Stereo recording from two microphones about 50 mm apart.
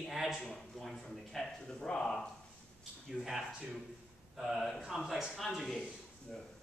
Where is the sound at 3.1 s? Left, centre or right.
Centre.